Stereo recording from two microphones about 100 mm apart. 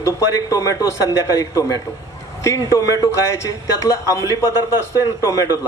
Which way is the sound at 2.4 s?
30° left (ahead or behind).